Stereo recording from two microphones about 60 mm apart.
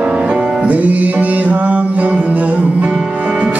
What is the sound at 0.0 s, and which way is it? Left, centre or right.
Music, centre.